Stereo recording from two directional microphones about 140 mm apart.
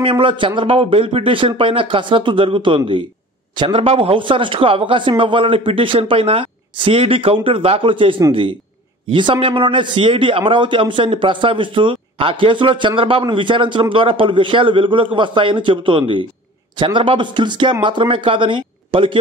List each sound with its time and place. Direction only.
0.0 s a man's voice: 35° right (ahead or behind)